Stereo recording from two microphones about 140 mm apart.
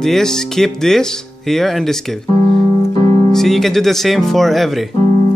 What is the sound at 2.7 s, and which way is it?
Piano, 30° left (ahead or behind).